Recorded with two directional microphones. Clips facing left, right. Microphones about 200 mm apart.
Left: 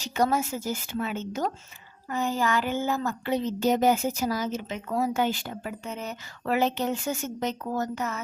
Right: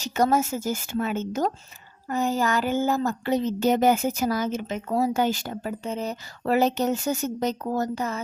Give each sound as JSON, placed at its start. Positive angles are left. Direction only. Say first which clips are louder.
{"t": 0.0, "sound": "a woman's voice", "louder": "right 3 dB", "side_deg": -45}